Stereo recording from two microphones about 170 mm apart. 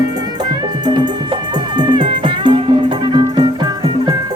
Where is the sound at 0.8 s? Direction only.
25° right (ahead or behind).